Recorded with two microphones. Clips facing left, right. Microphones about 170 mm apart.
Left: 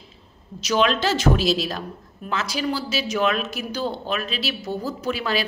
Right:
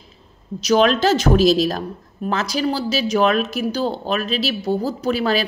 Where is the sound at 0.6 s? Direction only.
40° right (ahead or behind).